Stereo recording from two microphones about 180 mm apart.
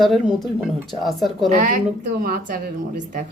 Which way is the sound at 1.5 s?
45° right (ahead or behind).